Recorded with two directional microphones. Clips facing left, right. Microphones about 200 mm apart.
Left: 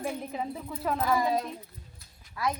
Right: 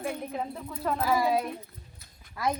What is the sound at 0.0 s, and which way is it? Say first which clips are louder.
Speech: even; 5° left (ahead or behind).